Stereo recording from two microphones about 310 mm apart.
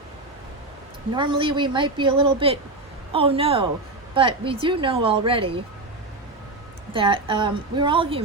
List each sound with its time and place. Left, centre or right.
1.1 s speech: centre
6.9 s speech: centre